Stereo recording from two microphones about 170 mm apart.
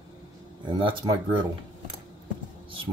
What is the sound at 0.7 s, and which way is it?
Speech, 30° right (ahead or behind).